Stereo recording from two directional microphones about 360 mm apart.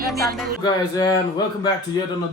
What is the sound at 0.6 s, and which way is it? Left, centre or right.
Speech, centre.